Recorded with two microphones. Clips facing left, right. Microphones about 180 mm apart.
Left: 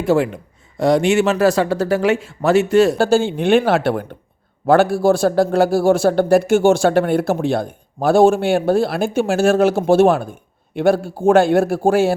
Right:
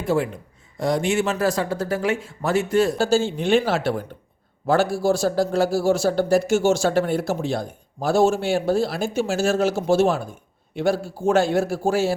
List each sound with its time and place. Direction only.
0.0 s a man's voice: 80° left; by 12.1 s 55° left (ahead or behind)